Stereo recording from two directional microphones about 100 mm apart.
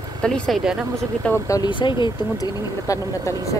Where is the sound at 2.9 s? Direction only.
35° left (ahead or behind).